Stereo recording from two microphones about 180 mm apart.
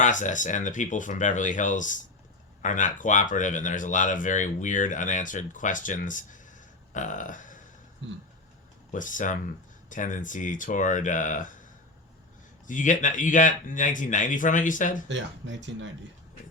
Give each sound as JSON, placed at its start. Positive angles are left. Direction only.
{"t": 0.0, "sound": "speech", "side_deg": 45}
{"t": 8.0, "sound": "speech", "side_deg": -90}
{"t": 8.9, "sound": "speech", "side_deg": 45}
{"t": 12.6, "sound": "speech", "side_deg": 45}
{"t": 15.1, "sound": "speech", "side_deg": -90}